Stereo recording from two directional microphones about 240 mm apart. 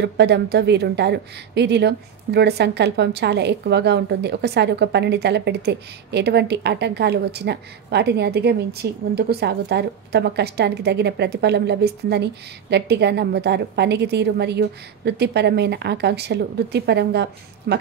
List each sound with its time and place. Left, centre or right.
0.0 s a woman's voice: right